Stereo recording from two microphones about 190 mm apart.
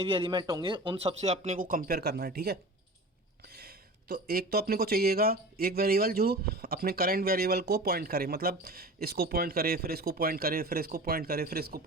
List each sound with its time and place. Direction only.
0.0 s speech: 30° right (ahead or behind); by 11.8 s 55° right (ahead or behind)